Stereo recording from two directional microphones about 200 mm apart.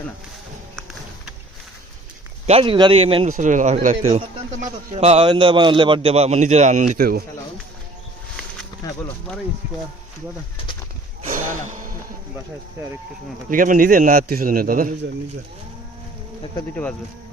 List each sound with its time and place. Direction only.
2.5 s a man's voice: 25° right (ahead or behind); by 7.3 s 45° right (ahead or behind)
11.3 s gasp: 40° right (ahead or behind)
13.5 s a man's voice: 45° right (ahead or behind)
16.6 s speech: 5° left (ahead or behind)